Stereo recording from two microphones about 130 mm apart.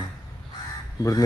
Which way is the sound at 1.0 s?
30° left (ahead or behind).